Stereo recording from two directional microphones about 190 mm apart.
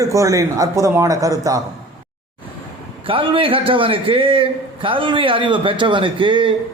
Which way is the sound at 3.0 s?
30° right (ahead or behind).